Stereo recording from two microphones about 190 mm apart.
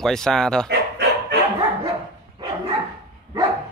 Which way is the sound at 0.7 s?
60° right (ahead or behind).